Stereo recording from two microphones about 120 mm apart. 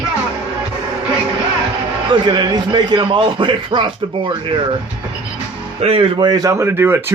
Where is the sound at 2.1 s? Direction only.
35° right (ahead or behind).